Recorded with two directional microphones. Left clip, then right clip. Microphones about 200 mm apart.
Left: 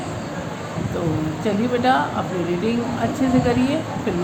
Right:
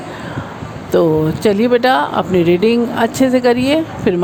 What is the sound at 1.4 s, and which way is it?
Speech, 55° right (ahead or behind).